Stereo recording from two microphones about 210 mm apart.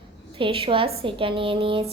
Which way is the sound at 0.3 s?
25° right (ahead or behind).